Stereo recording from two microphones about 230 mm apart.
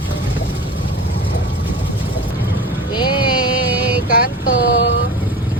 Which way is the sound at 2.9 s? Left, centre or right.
Centre.